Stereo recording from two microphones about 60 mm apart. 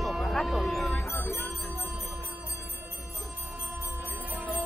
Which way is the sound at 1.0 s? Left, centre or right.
Left.